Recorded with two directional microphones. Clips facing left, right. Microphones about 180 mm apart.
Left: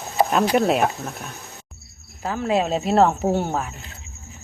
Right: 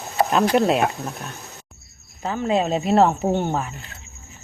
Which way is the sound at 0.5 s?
Centre (ahead or behind).